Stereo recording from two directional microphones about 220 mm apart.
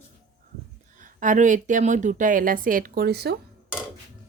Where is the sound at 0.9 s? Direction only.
35° right (ahead or behind).